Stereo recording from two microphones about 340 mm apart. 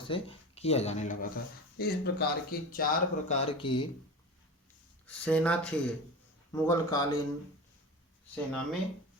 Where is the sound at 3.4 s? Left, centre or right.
Centre.